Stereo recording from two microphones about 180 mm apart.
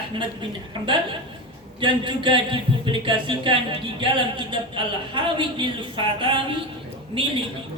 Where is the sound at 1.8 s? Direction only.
25° right (ahead or behind).